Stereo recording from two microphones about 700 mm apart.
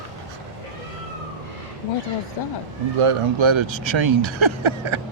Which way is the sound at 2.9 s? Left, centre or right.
Right.